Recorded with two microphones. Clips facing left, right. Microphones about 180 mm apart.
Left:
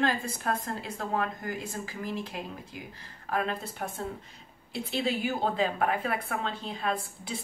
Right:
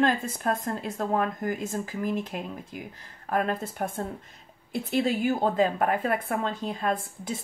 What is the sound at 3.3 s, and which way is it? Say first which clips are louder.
A woman's voice: right 4 dB; 50° right (ahead or behind).